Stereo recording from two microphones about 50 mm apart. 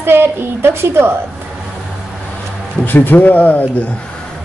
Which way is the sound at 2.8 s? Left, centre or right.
Left.